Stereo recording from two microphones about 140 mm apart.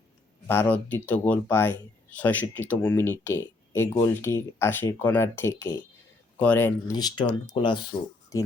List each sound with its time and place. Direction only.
0.4 s speech: 15° left (ahead or behind)
6.9 s speech: 30° left (ahead or behind)
8.3 s speech: 25° left (ahead or behind)